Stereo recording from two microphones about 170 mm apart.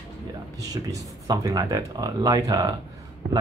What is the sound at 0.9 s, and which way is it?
Speech, 20° right (ahead or behind).